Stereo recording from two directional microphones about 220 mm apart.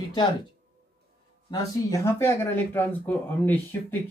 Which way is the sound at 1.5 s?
15° left (ahead or behind).